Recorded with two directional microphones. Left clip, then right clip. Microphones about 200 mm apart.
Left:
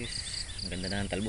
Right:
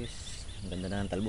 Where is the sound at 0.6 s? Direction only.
20° right (ahead or behind).